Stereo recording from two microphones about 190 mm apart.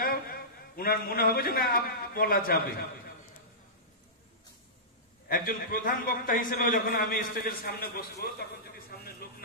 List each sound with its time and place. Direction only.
0.0 s a man's voice: 50° left (ahead or behind)
5.3 s a man's voice: 50° left (ahead or behind)